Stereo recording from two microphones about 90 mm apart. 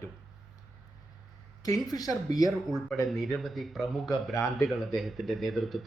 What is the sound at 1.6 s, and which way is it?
Speech, 45° left (ahead or behind).